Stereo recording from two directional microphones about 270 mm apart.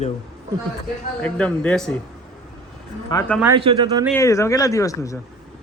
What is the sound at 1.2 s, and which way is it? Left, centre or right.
Speech, centre.